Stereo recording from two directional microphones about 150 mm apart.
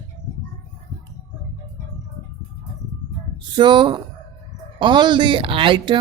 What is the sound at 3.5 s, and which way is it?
Speech, 30° right (ahead or behind).